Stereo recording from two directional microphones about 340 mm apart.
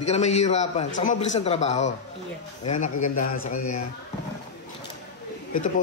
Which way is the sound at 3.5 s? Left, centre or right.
Left.